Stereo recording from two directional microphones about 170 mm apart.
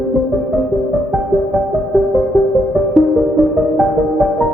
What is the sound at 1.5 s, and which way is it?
Music, centre (ahead or behind).